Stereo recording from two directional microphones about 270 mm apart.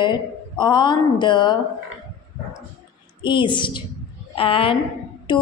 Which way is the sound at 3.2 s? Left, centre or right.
Centre.